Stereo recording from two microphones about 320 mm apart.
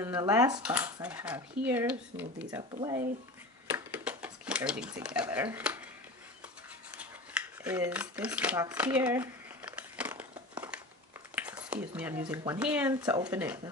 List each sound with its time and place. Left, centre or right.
0.0 s speech: centre
3.7 s dishes: centre
7.0 s a sound: centre
11.3 s speech: centre